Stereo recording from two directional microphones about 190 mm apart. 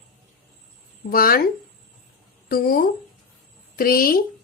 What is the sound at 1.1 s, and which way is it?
Speech, 50° left (ahead or behind).